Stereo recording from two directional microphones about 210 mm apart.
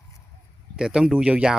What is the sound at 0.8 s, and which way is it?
Speech, 5° right (ahead or behind).